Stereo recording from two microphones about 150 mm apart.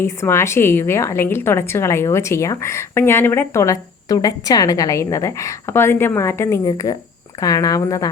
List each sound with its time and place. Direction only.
0.0 s a woman's voice: 15° left (ahead or behind)